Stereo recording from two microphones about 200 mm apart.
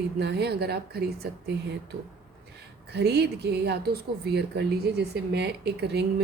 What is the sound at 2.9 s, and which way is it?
Speech, 55° right (ahead or behind).